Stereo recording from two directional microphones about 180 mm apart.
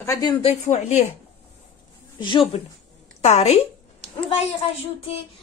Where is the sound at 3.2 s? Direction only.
35° left (ahead or behind).